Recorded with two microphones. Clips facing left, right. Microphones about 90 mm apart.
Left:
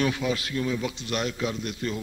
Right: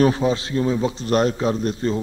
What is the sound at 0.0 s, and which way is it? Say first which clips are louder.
A man's voice: right 8 dB; 35° right (ahead or behind).